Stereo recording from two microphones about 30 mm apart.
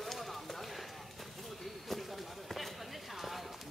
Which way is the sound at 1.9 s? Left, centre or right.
Centre.